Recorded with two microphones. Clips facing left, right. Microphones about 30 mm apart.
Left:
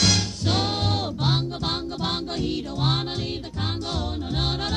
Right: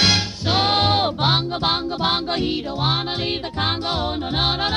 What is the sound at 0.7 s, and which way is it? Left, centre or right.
Music, right.